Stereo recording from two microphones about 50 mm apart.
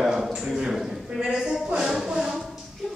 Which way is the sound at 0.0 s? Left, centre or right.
Centre.